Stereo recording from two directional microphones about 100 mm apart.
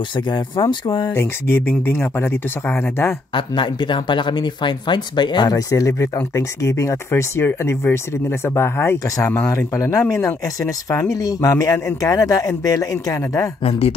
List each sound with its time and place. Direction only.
0.1 s speech: 50° left (ahead or behind)
1.1 s speech: 25° left (ahead or behind)
3.3 s speech: 55° left (ahead or behind); by 13.5 s 35° left (ahead or behind)
13.7 s speech: 75° left (ahead or behind)